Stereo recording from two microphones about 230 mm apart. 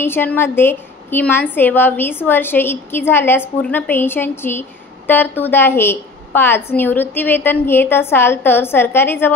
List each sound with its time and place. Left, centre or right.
0.0 s a woman's voice: centre